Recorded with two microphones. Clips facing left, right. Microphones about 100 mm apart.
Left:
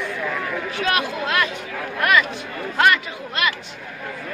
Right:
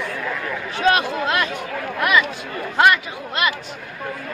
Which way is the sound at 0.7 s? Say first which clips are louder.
Right 6 dB; 30° right (ahead or behind).